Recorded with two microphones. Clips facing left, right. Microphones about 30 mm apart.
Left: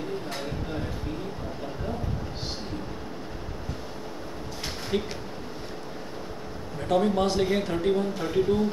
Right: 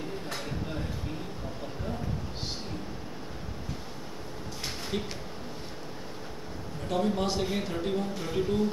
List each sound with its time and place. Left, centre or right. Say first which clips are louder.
4.9 s speech: left 6 dB; centre
6.9 s speech: left 5 dB; centre